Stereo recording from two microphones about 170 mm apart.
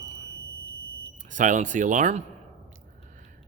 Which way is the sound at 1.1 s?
45° right (ahead or behind).